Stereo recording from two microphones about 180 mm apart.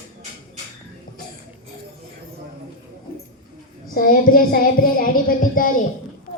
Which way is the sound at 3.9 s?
55° left (ahead or behind).